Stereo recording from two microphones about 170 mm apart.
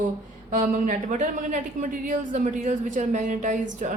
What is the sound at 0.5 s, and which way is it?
Speech, 50° right (ahead or behind).